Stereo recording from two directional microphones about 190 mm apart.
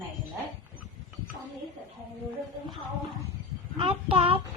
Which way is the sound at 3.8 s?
25° right (ahead or behind).